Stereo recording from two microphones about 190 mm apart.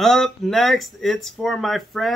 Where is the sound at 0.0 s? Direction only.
Centre (ahead or behind).